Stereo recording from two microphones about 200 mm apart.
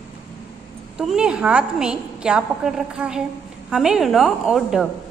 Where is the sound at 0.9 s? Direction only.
5° right (ahead or behind).